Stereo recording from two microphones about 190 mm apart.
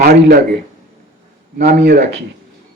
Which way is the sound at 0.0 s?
55° right (ahead or behind).